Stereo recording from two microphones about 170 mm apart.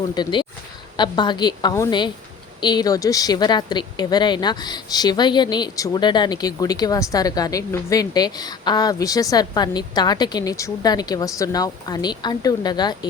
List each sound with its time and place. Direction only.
0.1 s speech: 25° left (ahead or behind)